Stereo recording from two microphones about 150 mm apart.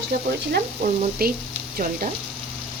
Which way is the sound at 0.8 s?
90° right.